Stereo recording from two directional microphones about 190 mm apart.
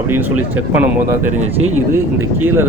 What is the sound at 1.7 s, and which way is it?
Speech, 10° right (ahead or behind).